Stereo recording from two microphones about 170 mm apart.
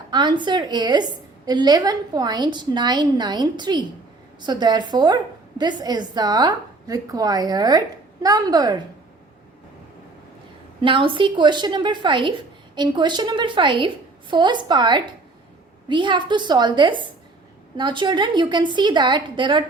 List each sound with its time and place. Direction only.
0.1 s a woman's voice: 25° right (ahead or behind)
10.8 s a woman's voice: 30° right (ahead or behind)